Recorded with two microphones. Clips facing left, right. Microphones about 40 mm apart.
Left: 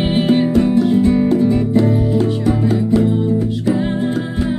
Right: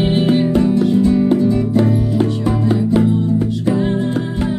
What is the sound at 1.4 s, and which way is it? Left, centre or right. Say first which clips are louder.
Music: left 1 dB; left.